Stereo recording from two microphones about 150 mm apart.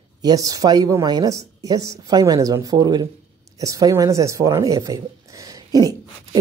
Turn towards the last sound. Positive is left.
turn(degrees=-25)  # may be behind; listen again after turning